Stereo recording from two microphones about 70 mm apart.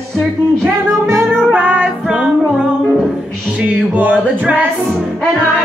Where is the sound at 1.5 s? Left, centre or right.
Centre.